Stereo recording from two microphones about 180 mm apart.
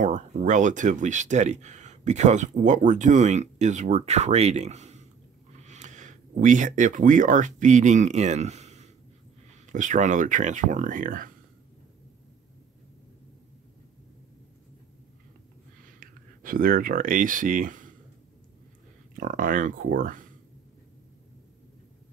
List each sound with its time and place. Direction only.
0.0 s speech: 40° right (ahead or behind)
16.0 s speech: 50° right (ahead or behind)
19.1 s speech: 50° right (ahead or behind)